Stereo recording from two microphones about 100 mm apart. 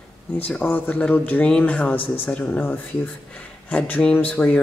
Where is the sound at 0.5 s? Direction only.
15° left (ahead or behind).